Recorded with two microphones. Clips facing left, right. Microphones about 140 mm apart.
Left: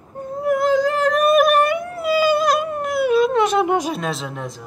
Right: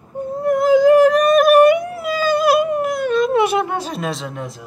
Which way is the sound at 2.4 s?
10° right (ahead or behind).